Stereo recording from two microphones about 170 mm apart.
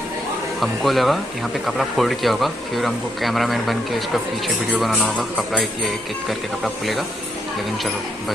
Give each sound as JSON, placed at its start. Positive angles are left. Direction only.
{"t": 0.6, "sound": "speech", "side_deg": 0}